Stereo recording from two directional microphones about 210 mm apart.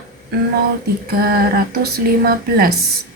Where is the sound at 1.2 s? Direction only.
45° right (ahead or behind).